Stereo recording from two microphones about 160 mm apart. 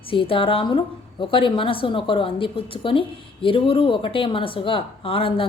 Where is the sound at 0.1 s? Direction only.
35° left (ahead or behind).